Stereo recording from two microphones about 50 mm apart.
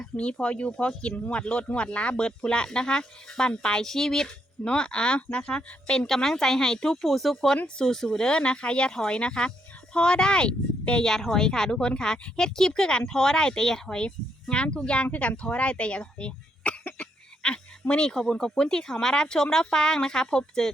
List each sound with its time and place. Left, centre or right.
0.0 s speech: left
11.1 s speech: centre
14.5 s speech: left